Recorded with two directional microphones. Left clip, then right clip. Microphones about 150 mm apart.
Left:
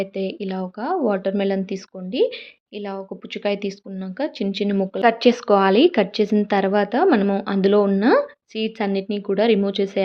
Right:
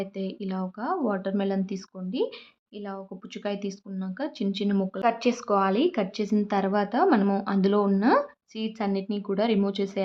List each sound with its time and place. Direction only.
0.0 s speech: 20° left (ahead or behind)
5.0 s a woman's voice: 30° left (ahead or behind)